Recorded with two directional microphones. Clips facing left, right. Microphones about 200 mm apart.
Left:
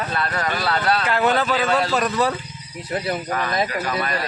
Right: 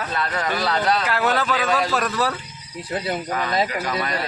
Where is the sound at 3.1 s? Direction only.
20° right (ahead or behind).